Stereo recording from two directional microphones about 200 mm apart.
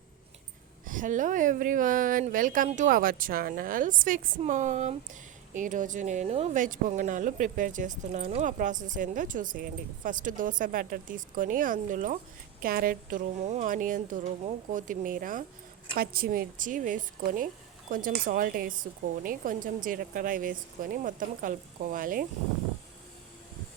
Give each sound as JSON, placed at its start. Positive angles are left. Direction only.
{"t": 0.9, "sound": "a woman's voice", "side_deg": -40}